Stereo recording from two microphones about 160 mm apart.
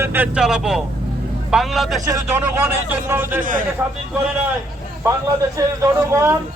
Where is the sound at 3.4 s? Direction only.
55° right (ahead or behind).